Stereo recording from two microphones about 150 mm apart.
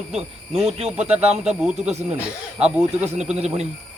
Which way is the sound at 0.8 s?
45° right (ahead or behind).